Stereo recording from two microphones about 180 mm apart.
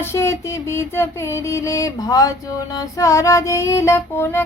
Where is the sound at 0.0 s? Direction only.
15° left (ahead or behind).